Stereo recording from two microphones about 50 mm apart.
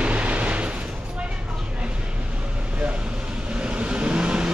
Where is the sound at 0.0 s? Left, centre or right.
Right.